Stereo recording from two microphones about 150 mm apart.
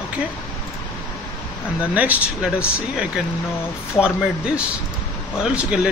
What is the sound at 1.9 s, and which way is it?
Speech, 10° right (ahead or behind).